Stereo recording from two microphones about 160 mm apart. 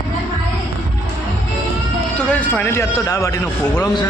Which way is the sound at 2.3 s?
10° left (ahead or behind).